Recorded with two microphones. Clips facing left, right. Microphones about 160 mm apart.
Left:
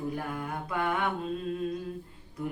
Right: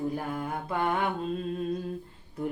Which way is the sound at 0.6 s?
30° right (ahead or behind).